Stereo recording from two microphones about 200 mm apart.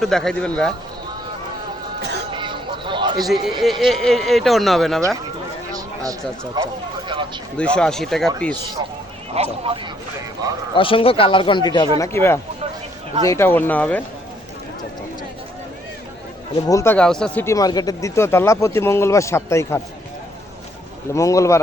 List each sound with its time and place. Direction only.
0.0 s speech: centre (ahead or behind)
2.0 s music: 55° right (ahead or behind)
2.3 s a sound: 25° right (ahead or behind)
3.2 s speech: centre (ahead or behind)
5.7 s speech: 20° right (ahead or behind)
7.5 s speech: 5° left (ahead or behind)
9.3 s speech: 30° right (ahead or behind)
10.8 s speech: 25° left (ahead or behind); by 14.0 s 10° left (ahead or behind)
16.6 s speech: 15° left (ahead or behind)
21.2 s speech: 15° left (ahead or behind)